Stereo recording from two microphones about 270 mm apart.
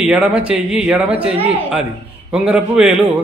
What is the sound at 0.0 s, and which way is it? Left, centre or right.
A man's voice, centre.